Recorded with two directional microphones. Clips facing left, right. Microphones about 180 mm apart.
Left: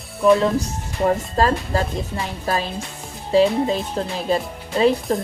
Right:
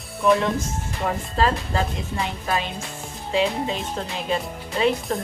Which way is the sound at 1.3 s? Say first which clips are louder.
Left 3 dB; 40° left (ahead or behind).